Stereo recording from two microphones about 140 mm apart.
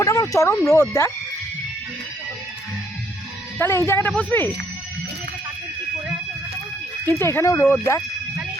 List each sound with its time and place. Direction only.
0.0 s speech: 20° left (ahead or behind)
3.6 s speech: 20° left (ahead or behind)
7.0 s speech: 20° left (ahead or behind)